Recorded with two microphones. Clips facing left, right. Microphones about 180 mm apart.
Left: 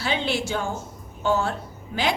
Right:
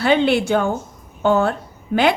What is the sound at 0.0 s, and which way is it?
A woman's voice, 60° right (ahead or behind).